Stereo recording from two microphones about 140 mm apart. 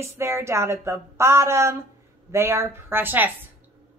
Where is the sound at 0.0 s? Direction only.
20° right (ahead or behind).